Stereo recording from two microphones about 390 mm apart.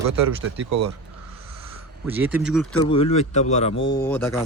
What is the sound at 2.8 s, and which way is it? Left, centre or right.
Speech, centre.